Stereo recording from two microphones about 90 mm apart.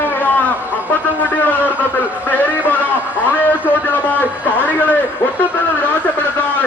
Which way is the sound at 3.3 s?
20° left (ahead or behind).